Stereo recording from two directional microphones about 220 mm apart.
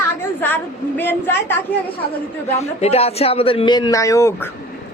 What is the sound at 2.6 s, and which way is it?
A man's voice, 30° left (ahead or behind).